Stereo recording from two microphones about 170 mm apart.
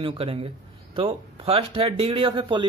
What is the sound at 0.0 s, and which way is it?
Speech, 35° right (ahead or behind).